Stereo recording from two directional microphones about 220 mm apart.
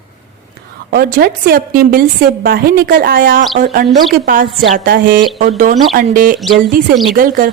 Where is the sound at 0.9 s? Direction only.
45° right (ahead or behind).